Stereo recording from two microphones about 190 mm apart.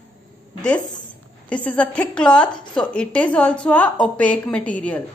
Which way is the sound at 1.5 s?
5° left (ahead or behind).